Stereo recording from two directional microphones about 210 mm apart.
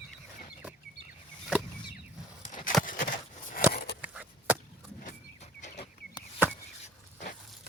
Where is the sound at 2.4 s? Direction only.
40° left (ahead or behind).